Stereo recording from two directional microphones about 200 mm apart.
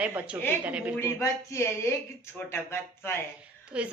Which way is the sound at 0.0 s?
5° right (ahead or behind).